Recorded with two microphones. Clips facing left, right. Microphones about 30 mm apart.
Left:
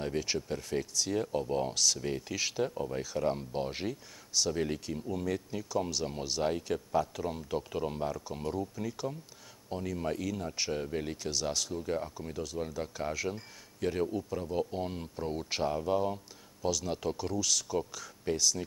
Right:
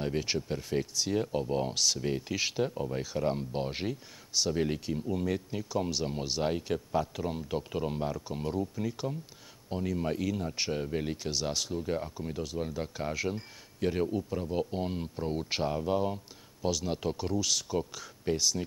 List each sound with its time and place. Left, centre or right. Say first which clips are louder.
0.0 s speech: right 2 dB; centre